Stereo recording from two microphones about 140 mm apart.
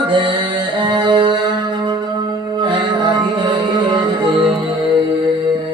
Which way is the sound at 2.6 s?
35° right (ahead or behind).